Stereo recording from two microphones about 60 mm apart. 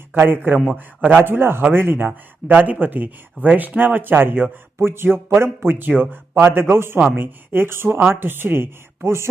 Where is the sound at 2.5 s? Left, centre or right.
Right.